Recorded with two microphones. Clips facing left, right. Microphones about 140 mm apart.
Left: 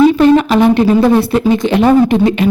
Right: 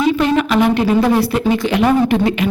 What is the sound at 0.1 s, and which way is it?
A woman's voice, 35° left (ahead or behind).